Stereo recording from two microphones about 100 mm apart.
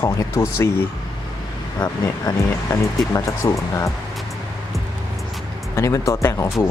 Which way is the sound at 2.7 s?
30° left (ahead or behind).